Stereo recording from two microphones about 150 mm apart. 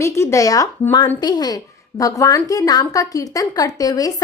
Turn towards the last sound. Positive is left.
turn(degrees=25)  # may be behind; listen again after turning